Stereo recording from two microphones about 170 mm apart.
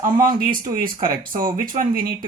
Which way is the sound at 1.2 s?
55° right (ahead or behind).